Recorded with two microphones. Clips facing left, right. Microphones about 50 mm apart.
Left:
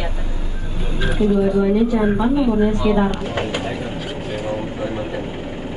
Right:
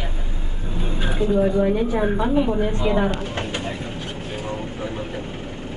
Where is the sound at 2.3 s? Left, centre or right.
Right.